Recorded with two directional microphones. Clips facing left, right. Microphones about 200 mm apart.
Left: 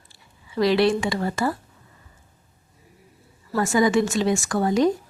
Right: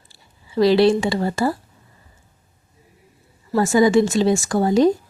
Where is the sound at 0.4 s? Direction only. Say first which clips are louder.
Right 5 dB; 30° right (ahead or behind).